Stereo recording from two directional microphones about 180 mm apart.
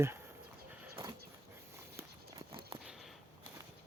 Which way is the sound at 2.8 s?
5° right (ahead or behind).